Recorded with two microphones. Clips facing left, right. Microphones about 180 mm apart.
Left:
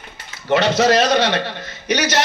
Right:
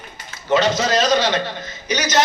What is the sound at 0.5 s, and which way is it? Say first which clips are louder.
A man's voice: left 3 dB; 65° left (ahead or behind).